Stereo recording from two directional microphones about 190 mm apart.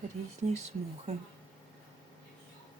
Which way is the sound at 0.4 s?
35° right (ahead or behind).